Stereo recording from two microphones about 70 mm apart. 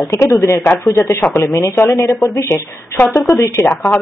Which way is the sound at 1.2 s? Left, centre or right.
Left.